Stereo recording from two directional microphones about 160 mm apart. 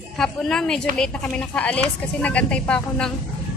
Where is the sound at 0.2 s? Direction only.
5° left (ahead or behind).